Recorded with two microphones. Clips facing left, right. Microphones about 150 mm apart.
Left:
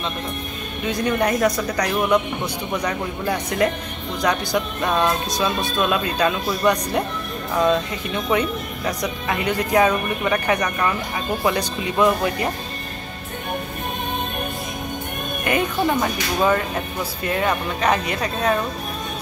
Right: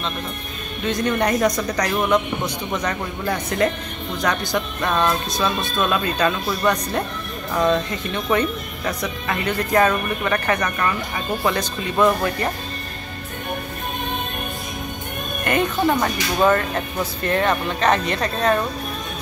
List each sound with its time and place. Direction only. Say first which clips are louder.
0.8 s speech: even; 5° left (ahead or behind)
15.4 s speech: right 1 dB; 5° left (ahead or behind)